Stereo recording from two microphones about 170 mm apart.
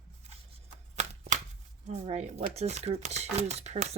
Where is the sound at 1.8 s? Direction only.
40° right (ahead or behind).